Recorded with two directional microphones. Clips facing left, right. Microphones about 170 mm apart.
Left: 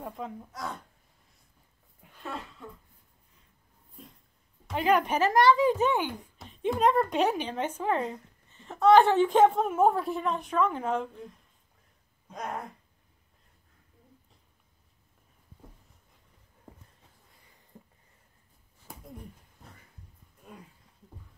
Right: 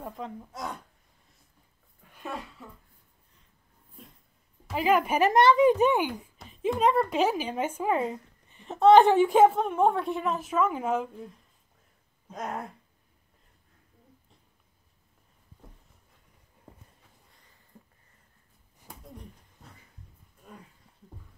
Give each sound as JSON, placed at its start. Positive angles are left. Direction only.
{"t": 0.0, "sound": "a woman's voice", "side_deg": 0}
{"t": 2.0, "sound": "a sound", "side_deg": 15}
{"t": 2.6, "sound": "a woman's voice", "side_deg": -5}
{"t": 4.6, "sound": "a woman's voice", "side_deg": -5}
{"t": 5.3, "sound": "speech", "side_deg": -20}
{"t": 6.3, "sound": "a woman's voice", "side_deg": 0}
{"t": 9.6, "sound": "a woman's voice", "side_deg": 5}
{"t": 12.3, "sound": "a woman's voice", "side_deg": 0}